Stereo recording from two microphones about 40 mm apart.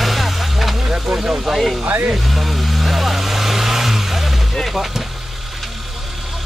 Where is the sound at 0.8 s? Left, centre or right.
Centre.